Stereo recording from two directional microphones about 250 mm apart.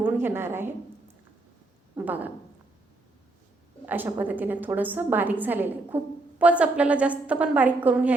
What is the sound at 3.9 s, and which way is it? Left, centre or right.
A woman's voice, centre.